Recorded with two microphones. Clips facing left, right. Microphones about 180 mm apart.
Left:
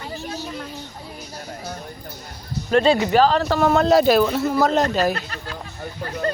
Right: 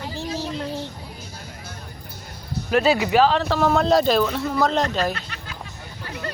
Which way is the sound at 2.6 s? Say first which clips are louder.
Left 2 dB; 5° right (ahead or behind).